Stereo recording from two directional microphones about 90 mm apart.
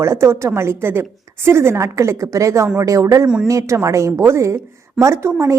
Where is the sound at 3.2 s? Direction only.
10° right (ahead or behind).